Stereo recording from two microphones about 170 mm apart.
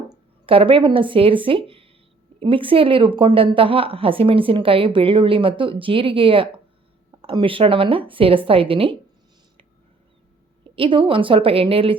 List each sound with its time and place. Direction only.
0.1 s a woman's voice: 30° right (ahead or behind)
10.6 s a woman's voice: 30° right (ahead or behind)